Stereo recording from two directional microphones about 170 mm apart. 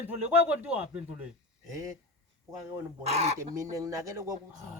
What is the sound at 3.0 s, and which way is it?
Speech, 40° right (ahead or behind).